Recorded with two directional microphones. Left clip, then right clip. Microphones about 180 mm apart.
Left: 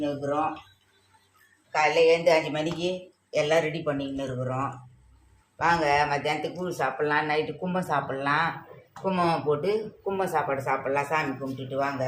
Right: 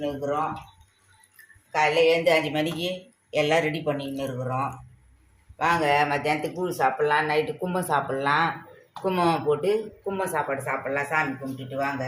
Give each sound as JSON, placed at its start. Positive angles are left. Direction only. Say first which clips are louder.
{"t": 1.7, "sound": "a woman's voice", "louder": "even", "side_deg": -30}
{"t": 5.5, "sound": "speech", "louder": "right 1 dB", "side_deg": -25}
{"t": 10.0, "sound": "a woman's voice", "louder": "even", "side_deg": 0}